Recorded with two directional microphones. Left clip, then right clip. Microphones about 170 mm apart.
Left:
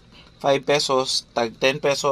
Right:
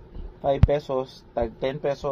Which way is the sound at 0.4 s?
20° left (ahead or behind).